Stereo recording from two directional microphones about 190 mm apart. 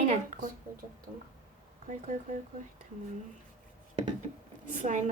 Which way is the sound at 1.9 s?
40° right (ahead or behind).